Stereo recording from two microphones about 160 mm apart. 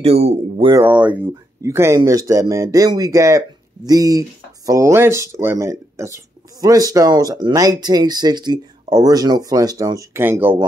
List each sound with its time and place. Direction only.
0.0 s speech: 40° right (ahead or behind)
0.8 s speech: 10° right (ahead or behind)